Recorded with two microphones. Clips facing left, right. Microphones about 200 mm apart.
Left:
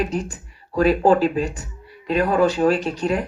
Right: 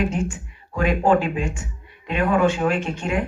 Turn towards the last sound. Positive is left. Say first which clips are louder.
# left 2 dB
turn(degrees=35)  # may be behind; listen again after turning